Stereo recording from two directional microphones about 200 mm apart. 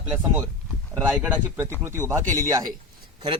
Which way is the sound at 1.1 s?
5° right (ahead or behind).